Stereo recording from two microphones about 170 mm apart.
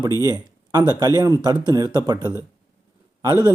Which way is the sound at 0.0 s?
20° right (ahead or behind).